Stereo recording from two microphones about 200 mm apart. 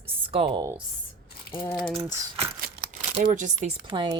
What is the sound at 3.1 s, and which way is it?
Speech, 35° right (ahead or behind).